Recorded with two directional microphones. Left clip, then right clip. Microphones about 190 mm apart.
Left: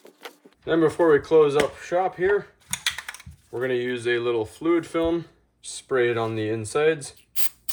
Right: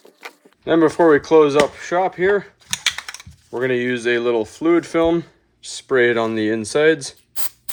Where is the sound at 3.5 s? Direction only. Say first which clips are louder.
Right 6 dB; 40° right (ahead or behind).